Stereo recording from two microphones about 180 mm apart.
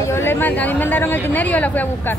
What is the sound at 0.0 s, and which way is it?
Speech, 15° left (ahead or behind).